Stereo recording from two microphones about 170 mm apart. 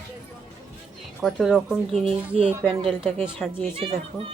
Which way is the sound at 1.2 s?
Centre (ahead or behind).